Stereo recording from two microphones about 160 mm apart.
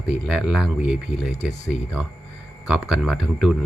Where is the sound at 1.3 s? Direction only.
45° left (ahead or behind).